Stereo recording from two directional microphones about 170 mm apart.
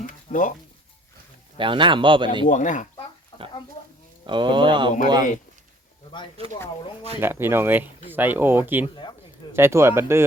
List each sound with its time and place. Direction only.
0.0 s a sound: 45° left (ahead or behind)
1.5 s speech: 30° right (ahead or behind)
2.5 s speech: 50° left (ahead or behind)
4.3 s speech: 30° right (ahead or behind)
7.2 s speech: 15° right (ahead or behind)